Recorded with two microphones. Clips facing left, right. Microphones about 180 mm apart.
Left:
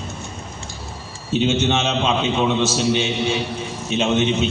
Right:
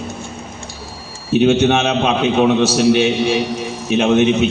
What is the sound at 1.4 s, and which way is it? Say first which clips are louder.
A man's voice: right 6 dB; 60° right (ahead or behind).